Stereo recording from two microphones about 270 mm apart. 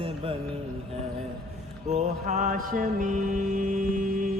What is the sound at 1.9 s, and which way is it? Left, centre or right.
Mantra, right.